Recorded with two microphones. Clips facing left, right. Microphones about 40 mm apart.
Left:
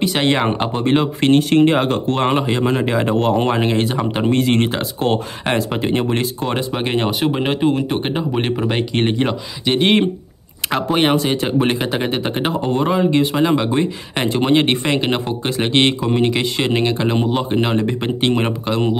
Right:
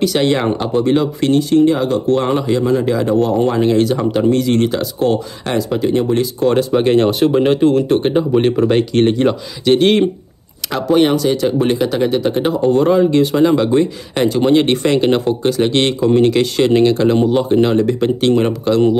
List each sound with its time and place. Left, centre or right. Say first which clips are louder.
0.0 s speech: right 2 dB; left
6.4 s speech: right 8 dB; centre